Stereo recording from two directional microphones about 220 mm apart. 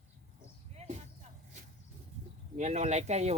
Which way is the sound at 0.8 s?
30° right (ahead or behind).